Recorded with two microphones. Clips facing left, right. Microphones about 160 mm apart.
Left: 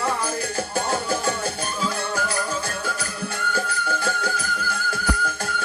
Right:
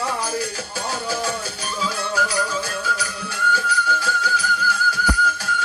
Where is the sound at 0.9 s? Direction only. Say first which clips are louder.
Right 2 dB; 55° left (ahead or behind).